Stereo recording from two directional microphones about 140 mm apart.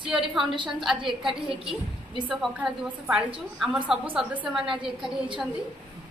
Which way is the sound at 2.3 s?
5° right (ahead or behind).